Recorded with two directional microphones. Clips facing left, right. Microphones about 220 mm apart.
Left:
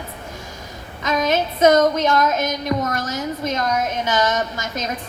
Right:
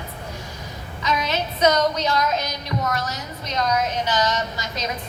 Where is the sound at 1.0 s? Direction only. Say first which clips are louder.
Left 5 dB; 45° left (ahead or behind).